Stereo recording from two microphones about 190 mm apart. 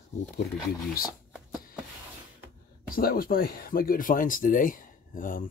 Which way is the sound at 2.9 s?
50° left (ahead or behind).